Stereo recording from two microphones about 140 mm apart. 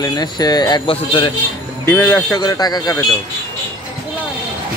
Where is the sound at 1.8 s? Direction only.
15° left (ahead or behind).